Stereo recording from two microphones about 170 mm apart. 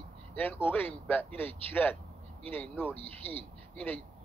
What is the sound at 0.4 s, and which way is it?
Speech, 10° left (ahead or behind).